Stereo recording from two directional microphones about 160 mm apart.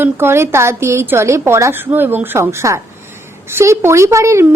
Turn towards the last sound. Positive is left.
turn(degrees=-15)  # may be behind; listen again after turning